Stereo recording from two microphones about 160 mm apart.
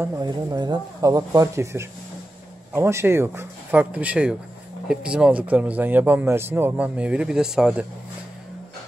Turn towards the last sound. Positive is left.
turn(degrees=-5)  # may be behind; listen again after turning